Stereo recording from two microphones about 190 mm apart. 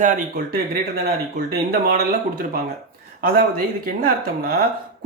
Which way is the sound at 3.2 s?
50° right (ahead or behind).